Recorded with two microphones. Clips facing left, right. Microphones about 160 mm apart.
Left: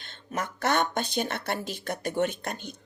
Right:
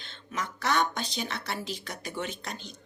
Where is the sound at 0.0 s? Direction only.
55° left (ahead or behind).